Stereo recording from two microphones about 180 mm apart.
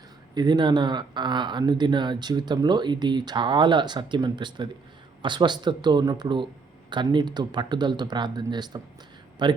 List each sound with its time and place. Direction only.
0.3 s speech: 25° right (ahead or behind)